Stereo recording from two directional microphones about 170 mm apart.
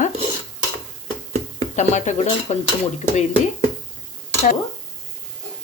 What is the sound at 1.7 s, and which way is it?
Speech, 45° left (ahead or behind).